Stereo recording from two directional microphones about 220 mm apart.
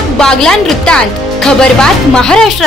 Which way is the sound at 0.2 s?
5° left (ahead or behind).